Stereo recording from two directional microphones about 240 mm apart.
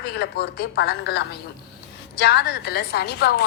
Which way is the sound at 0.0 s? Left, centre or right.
Left.